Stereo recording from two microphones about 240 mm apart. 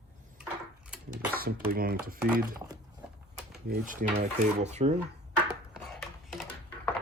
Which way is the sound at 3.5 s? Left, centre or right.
Right.